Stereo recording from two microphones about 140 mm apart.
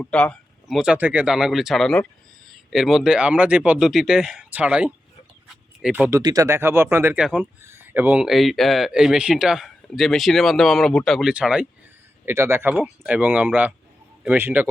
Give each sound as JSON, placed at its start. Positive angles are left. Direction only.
{"t": 0.0, "sound": "speech", "side_deg": 10}
{"t": 0.8, "sound": "speech", "side_deg": -10}
{"t": 6.1, "sound": "speech", "side_deg": -25}
{"t": 8.2, "sound": "speech", "side_deg": 0}
{"t": 12.2, "sound": "speech", "side_deg": -20}